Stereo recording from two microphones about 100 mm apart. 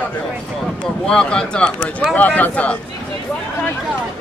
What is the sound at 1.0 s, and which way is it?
Speech, 10° left (ahead or behind).